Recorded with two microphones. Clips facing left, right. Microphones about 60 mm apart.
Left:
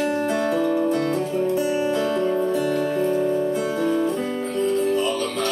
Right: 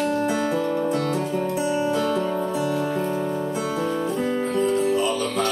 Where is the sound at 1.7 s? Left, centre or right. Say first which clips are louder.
Left 1 dB; left.